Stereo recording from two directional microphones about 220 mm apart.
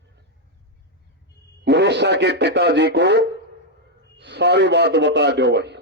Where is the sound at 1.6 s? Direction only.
50° right (ahead or behind).